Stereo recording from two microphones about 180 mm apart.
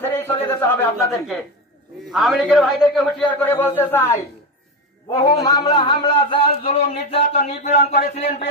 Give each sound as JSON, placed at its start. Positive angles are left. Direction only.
{"t": 0.0, "sound": "a sound", "side_deg": 10}
{"t": 1.1, "sound": "a man's voice", "side_deg": 0}
{"t": 3.3, "sound": "speech", "side_deg": 10}
{"t": 5.4, "sound": "speech", "side_deg": 20}